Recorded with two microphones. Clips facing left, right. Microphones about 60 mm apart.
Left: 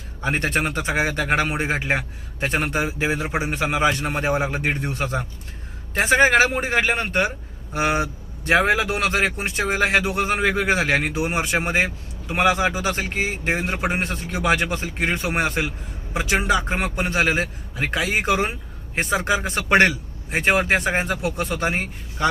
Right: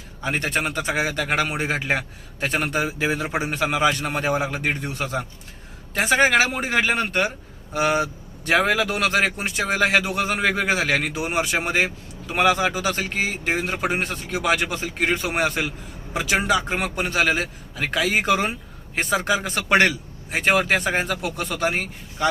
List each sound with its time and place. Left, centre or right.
0.2 s a man's voice: left